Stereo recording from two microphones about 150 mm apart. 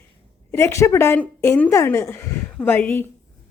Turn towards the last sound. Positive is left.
turn(degrees=10)  # may be behind; listen again after turning